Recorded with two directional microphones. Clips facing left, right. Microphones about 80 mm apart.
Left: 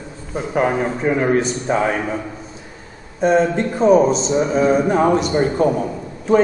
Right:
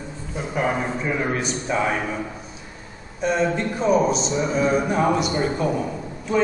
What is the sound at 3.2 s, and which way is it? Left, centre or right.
A man's voice, left.